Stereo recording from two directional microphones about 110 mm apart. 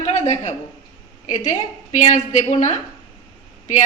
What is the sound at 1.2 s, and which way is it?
A woman's voice, 90° left.